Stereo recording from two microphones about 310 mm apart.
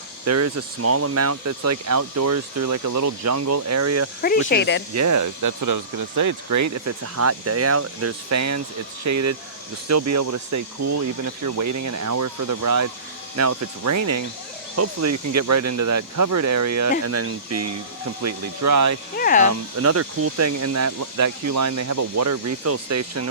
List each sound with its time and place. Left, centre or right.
0.3 s speech: right
4.2 s speech: left
4.9 s speech: right
17.1 s speech: right
19.1 s speech: left
19.5 s speech: right